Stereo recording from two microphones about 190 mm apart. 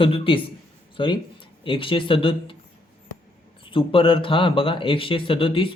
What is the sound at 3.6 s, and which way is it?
Speech, 25° left (ahead or behind).